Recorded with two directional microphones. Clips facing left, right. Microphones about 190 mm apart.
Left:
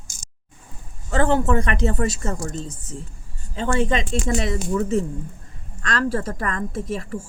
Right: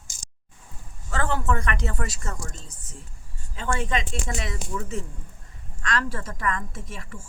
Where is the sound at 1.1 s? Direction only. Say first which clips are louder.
Left 7 dB; 25° left (ahead or behind).